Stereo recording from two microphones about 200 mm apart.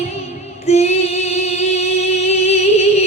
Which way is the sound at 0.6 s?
35° left (ahead or behind).